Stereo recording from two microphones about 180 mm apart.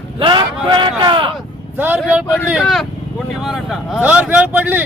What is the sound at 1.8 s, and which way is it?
A man's voice, 5° right (ahead or behind).